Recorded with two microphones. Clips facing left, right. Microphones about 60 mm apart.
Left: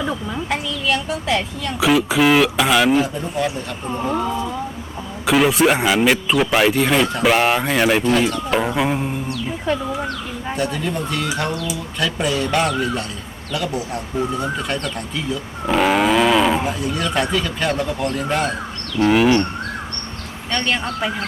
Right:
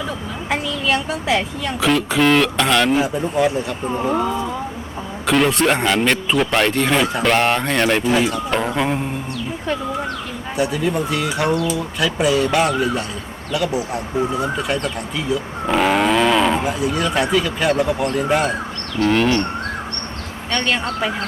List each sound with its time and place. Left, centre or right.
1.3 s speech: centre
1.8 s speech: centre
3.0 s speech: centre
19.0 s speech: centre
20.5 s speech: centre